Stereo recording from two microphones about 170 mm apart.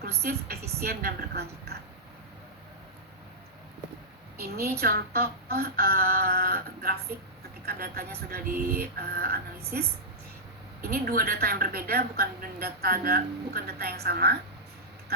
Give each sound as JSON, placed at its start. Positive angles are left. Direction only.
{"t": 0.0, "sound": "a woman's voice", "side_deg": -65}
{"t": 4.4, "sound": "a woman's voice", "side_deg": -65}